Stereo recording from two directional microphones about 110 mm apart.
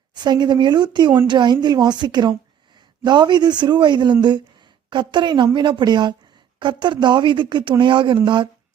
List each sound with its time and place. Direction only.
0.1 s a woman's voice: 40° right (ahead or behind)